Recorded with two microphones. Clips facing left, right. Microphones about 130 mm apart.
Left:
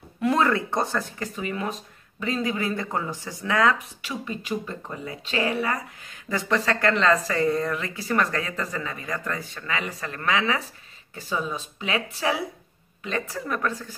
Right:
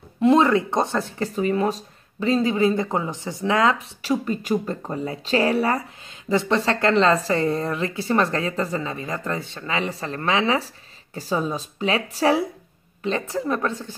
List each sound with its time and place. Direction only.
0.2 s speech: 20° right (ahead or behind)
4.0 s speech: 40° right (ahead or behind)